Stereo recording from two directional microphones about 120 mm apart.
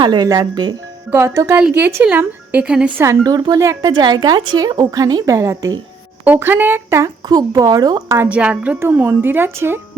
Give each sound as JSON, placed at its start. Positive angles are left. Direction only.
{"t": 0.0, "sound": "a woman's voice", "side_deg": -35}
{"t": 1.1, "sound": "speech", "side_deg": -20}
{"t": 3.0, "sound": "speech", "side_deg": -25}
{"t": 3.3, "sound": "a woman's voice", "side_deg": -35}
{"t": 6.2, "sound": "speech", "side_deg": -15}
{"t": 8.2, "sound": "speech", "side_deg": -10}